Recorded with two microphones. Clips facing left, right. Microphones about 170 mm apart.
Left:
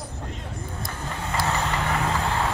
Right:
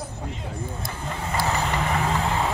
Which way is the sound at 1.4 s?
Centre (ahead or behind).